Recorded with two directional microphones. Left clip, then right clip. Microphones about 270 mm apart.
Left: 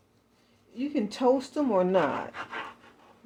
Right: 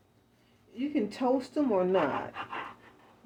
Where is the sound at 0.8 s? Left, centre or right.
Centre.